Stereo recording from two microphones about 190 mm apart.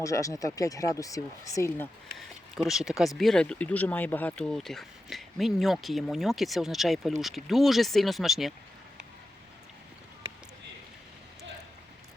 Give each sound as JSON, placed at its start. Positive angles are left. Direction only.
{"t": 0.0, "sound": "speech", "side_deg": 15}
{"t": 2.1, "sound": "speech", "side_deg": 0}